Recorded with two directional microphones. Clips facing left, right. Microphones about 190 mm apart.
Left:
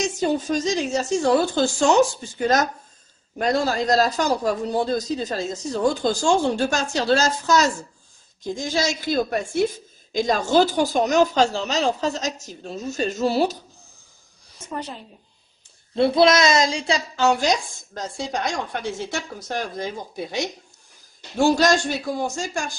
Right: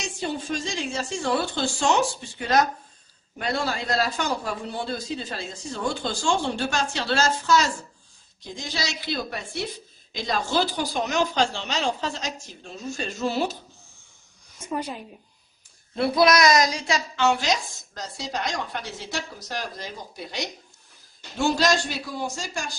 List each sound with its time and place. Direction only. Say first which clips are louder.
0.0 s a man's voice: left 8 dB; 45° left (ahead or behind)
14.6 s a woman's voice: right 2 dB; 10° right (ahead or behind)
15.9 s a woman's voice: left 4 dB; 25° left (ahead or behind); by 22.8 s 50° left (ahead or behind)